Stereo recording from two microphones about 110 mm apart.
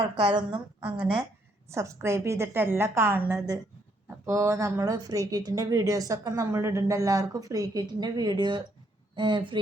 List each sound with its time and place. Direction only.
0.0 s a woman's voice: 45° right (ahead or behind)
0.8 s speech: 10° right (ahead or behind)
1.7 s a woman's voice: 25° right (ahead or behind); by 9.6 s 50° right (ahead or behind)